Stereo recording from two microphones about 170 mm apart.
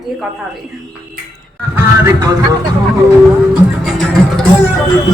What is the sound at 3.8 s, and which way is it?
Music, 5° left (ahead or behind).